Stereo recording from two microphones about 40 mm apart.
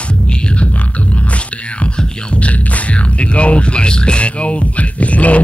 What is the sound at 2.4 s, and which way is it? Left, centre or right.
Music, left.